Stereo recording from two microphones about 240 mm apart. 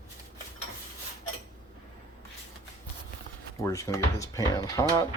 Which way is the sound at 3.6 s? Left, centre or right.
Centre.